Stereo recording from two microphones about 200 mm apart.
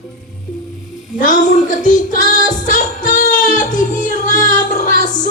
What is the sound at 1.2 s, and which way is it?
Child singing, 40° left (ahead or behind).